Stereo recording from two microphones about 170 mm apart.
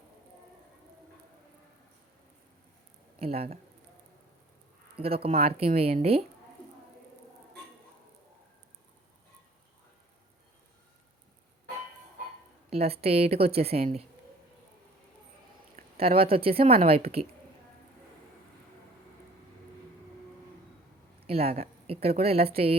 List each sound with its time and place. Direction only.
3.2 s speech: 35° right (ahead or behind)
4.9 s speech: 35° right (ahead or behind)
12.7 s speech: 35° right (ahead or behind)
16.0 s speech: 35° right (ahead or behind)
21.2 s a woman's voice: 35° right (ahead or behind)